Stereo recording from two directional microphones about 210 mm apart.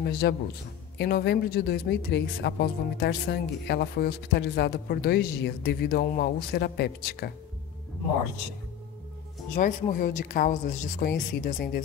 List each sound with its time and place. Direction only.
0.0 s a woman's voice: 50° left (ahead or behind)
9.6 s a woman's voice: 40° left (ahead or behind)